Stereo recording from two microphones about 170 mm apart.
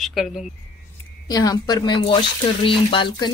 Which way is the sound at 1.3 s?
20° left (ahead or behind).